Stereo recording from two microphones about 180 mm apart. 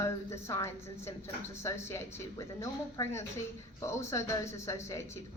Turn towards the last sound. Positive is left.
turn(degrees=15)  # may be behind; listen again after turning